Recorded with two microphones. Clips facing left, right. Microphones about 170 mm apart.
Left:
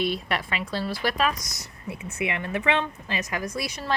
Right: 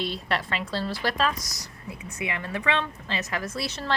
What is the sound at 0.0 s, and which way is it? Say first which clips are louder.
Speech: left 2 dB; 15° left (ahead or behind).